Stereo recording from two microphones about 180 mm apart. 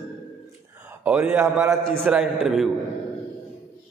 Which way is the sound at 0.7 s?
10° right (ahead or behind).